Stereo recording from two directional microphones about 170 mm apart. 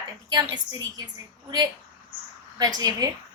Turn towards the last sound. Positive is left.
turn(degrees=-20)  # may be behind; listen again after turning